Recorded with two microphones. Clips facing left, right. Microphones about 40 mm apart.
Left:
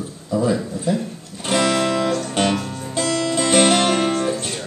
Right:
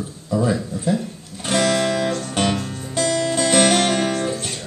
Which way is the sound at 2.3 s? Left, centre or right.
Centre.